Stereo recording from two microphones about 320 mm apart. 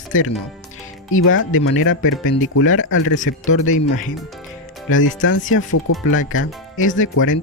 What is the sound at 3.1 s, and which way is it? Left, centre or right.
Speech, left.